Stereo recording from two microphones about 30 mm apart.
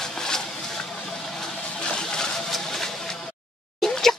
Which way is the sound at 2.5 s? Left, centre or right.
Centre.